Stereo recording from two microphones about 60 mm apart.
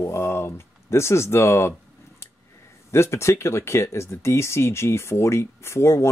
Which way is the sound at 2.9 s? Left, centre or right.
Left.